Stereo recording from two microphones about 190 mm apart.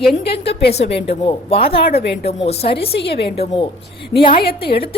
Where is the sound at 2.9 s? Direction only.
60° left (ahead or behind).